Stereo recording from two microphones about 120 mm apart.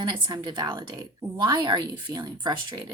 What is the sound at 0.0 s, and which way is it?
Speech, 35° right (ahead or behind).